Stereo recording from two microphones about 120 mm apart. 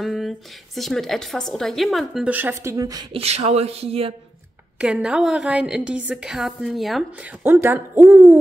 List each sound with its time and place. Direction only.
0.0 s a woman's voice: centre (ahead or behind)
2.2 s speech: 15° right (ahead or behind); by 3.1 s 30° right (ahead or behind)
3.1 s speech: 60° right (ahead or behind)
4.7 s a woman's voice: 5° right (ahead or behind)
7.4 s speech: 20° right (ahead or behind)